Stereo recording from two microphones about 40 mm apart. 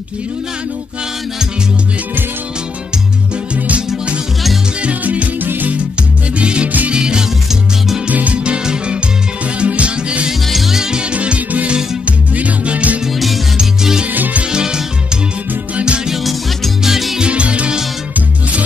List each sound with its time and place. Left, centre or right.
3.5 s music: right
5.4 s music: right
6.3 s music: right
8.1 s music: right
8.5 s music: right
10.4 s music: centre
10.8 s music: right
13.6 s music: centre
14.1 s music: right
14.5 s music: centre
16.8 s music: centre
17.2 s music: right